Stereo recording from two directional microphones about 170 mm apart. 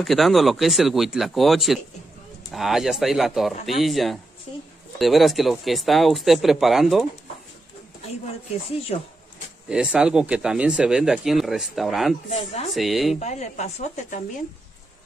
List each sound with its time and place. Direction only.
0.0 s speech: centre (ahead or behind)
9.7 s speech: 5° right (ahead or behind)
12.3 s speech: 40° left (ahead or behind)
12.7 s speech: centre (ahead or behind)
13.2 s a woman's voice: 40° left (ahead or behind)